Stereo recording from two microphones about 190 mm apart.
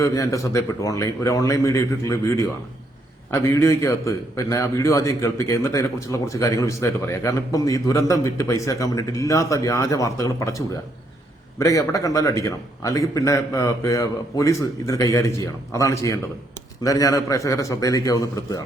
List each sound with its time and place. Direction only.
0.0 s a man's voice: 15° left (ahead or behind)
11.6 s a man's voice: 15° left (ahead or behind)